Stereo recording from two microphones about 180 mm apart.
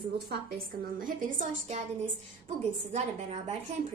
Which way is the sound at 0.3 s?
55° right (ahead or behind).